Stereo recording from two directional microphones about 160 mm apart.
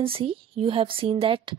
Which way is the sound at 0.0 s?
35° right (ahead or behind).